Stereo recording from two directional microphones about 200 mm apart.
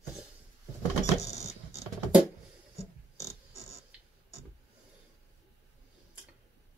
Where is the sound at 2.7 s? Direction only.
15° left (ahead or behind).